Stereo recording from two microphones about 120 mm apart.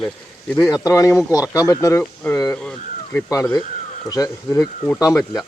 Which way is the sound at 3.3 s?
30° left (ahead or behind).